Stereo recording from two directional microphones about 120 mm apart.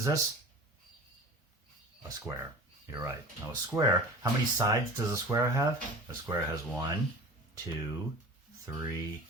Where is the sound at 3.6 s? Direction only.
25° right (ahead or behind).